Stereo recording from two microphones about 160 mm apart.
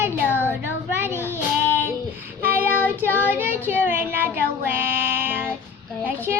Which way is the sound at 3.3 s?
15° right (ahead or behind).